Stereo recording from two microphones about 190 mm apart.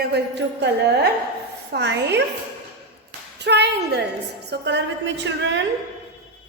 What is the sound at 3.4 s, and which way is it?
A woman's voice, 65° right (ahead or behind).